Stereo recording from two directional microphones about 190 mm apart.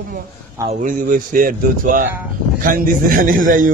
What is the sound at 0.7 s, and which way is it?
A man's voice, 45° right (ahead or behind).